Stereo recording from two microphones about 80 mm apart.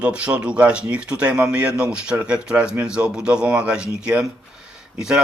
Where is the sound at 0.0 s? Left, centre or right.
Centre.